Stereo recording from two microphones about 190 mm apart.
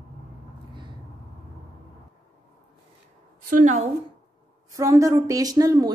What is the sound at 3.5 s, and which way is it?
Speech, 40° right (ahead or behind).